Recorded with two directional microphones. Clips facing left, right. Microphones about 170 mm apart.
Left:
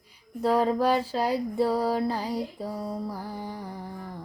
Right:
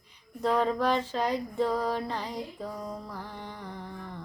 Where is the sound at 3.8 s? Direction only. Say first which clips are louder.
Left 2 dB; 40° left (ahead or behind).